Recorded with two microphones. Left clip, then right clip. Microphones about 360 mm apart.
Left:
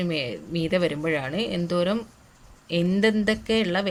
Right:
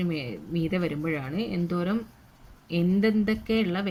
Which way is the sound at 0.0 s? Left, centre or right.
Centre.